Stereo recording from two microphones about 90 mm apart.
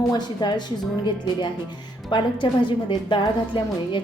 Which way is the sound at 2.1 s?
60° left (ahead or behind).